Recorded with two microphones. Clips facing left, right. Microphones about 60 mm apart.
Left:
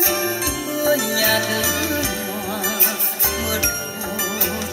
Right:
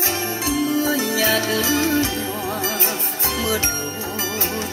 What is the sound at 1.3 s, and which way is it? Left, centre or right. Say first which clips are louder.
Music: right 1 dB; left.